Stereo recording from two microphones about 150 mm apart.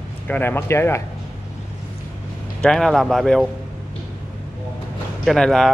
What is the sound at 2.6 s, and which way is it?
Speech, 5° left (ahead or behind).